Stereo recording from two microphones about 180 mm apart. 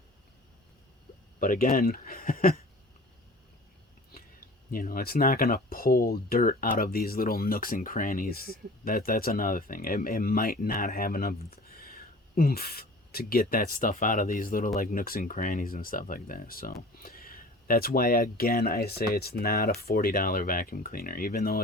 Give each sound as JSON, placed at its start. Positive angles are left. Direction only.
{"t": 1.4, "sound": "speech", "side_deg": 50}
{"t": 4.1, "sound": "speech", "side_deg": 55}